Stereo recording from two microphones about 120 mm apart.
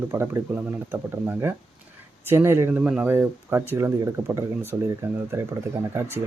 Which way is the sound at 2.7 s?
10° right (ahead or behind).